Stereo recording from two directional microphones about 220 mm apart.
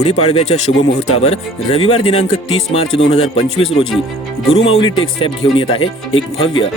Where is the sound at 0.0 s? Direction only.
25° left (ahead or behind).